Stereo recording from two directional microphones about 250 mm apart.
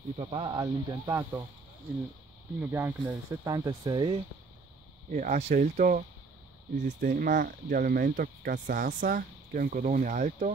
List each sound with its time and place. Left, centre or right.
0.1 s speech: right
2.6 s speech: centre
5.1 s speech: right